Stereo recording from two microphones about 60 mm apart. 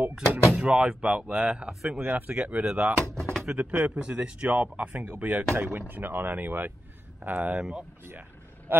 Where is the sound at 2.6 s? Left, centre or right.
Centre.